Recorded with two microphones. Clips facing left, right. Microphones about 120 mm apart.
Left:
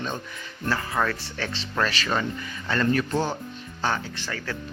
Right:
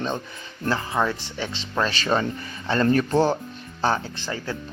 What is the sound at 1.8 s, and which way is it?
Speech, 30° right (ahead or behind).